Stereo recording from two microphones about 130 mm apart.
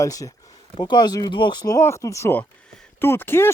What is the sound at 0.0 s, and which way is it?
Speech, 25° left (ahead or behind).